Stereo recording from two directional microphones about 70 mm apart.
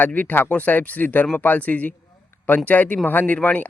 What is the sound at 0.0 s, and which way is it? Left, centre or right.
A man's voice, left.